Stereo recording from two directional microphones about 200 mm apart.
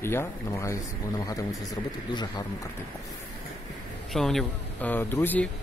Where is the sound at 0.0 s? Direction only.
10° left (ahead or behind).